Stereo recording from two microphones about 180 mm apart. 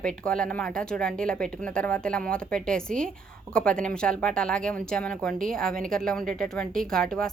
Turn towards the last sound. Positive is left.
turn(degrees=5)  # may be behind; listen again after turning